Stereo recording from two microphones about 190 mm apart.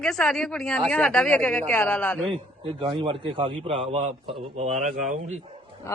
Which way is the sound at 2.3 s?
25° right (ahead or behind).